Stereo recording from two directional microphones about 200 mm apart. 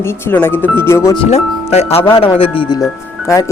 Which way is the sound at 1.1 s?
30° left (ahead or behind).